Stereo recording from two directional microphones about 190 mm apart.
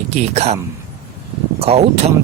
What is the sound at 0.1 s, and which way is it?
Speech, 35° right (ahead or behind).